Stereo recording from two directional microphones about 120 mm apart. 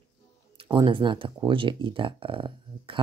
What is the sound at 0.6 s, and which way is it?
Speech, 40° right (ahead or behind).